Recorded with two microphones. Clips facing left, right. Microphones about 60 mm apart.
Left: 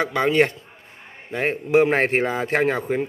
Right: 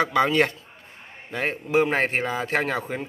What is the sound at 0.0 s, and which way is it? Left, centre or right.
Speech, left.